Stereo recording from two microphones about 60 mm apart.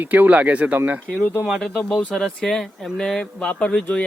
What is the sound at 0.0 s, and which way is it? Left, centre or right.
Speech, right.